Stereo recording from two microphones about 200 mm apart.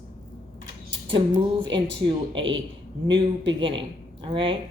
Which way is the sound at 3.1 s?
25° right (ahead or behind).